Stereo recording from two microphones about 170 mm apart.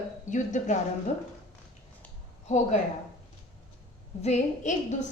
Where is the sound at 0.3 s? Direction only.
45° left (ahead or behind).